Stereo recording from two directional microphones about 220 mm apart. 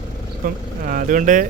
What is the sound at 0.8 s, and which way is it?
Speech, 35° right (ahead or behind).